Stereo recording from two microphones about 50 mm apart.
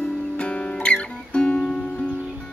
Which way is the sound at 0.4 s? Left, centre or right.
Left.